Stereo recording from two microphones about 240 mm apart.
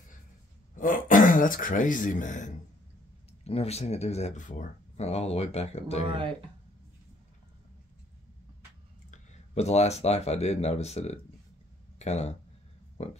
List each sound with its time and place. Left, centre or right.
0.7 s speech: left
6.0 s speech: right
9.1 s speech: left